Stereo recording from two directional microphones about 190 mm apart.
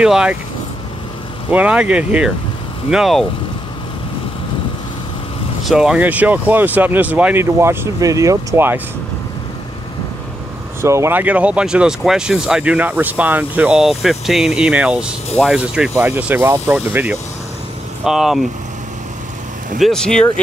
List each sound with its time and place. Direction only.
0.0 s speech: 5° right (ahead or behind)
1.5 s speech: 5° right (ahead or behind)
5.6 s speech: centre (ahead or behind)
10.8 s speech: 15° right (ahead or behind)
19.8 s speech: 5° left (ahead or behind)